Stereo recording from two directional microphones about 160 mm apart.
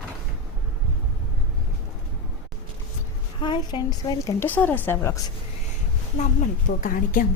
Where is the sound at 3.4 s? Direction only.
30° left (ahead or behind).